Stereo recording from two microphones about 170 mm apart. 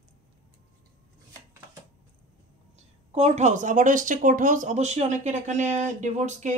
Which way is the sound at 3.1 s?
40° right (ahead or behind).